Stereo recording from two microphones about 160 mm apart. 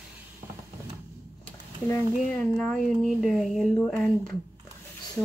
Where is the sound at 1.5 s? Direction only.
15° left (ahead or behind).